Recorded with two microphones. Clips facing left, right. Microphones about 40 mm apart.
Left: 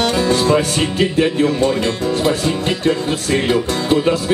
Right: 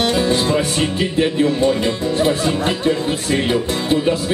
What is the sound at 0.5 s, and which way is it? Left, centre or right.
Music, centre.